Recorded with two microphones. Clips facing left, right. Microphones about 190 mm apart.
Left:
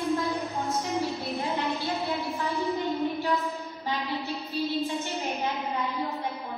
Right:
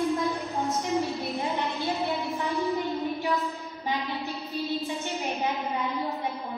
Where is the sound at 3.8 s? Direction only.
20° right (ahead or behind).